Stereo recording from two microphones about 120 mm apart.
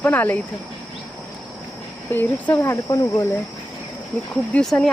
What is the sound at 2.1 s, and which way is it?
Speech, 15° left (ahead or behind).